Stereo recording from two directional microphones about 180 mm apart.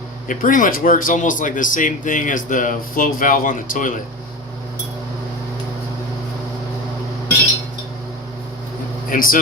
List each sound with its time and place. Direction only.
0.3 s speech: 50° left (ahead or behind)
9.0 s speech: 50° left (ahead or behind)